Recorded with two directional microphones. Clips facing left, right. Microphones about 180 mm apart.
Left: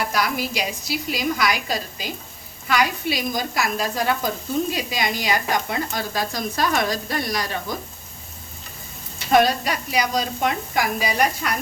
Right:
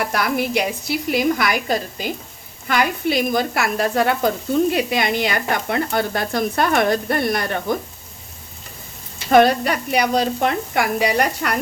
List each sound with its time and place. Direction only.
0.1 s speech: 55° right (ahead or behind)
9.3 s speech: 60° right (ahead or behind)